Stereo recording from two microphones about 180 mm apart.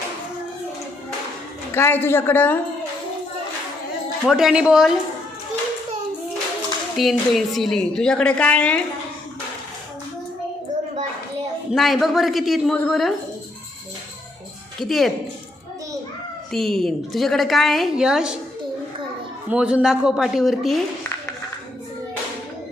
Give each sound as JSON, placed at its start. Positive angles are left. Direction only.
{"t": 1.7, "sound": "a woman's voice", "side_deg": 10}
{"t": 4.3, "sound": "a woman's voice", "side_deg": 0}
{"t": 6.9, "sound": "a woman's voice", "side_deg": 0}
{"t": 11.7, "sound": "a woman's voice", "side_deg": 0}
{"t": 14.8, "sound": "a woman's voice", "side_deg": 0}
{"t": 16.5, "sound": "a woman's voice", "side_deg": 0}
{"t": 19.5, "sound": "a woman's voice", "side_deg": -5}